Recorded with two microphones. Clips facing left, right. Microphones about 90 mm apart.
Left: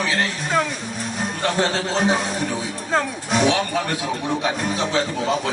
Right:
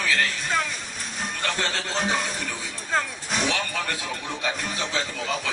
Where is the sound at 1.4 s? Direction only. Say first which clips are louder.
Left 7 dB; 25° left (ahead or behind).